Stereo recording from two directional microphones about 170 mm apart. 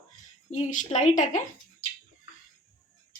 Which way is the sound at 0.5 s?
45° left (ahead or behind).